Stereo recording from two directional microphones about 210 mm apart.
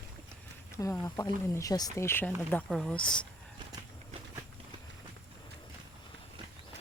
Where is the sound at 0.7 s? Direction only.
10° left (ahead or behind).